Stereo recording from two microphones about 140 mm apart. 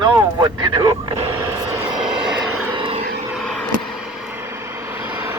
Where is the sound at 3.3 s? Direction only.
5° left (ahead or behind).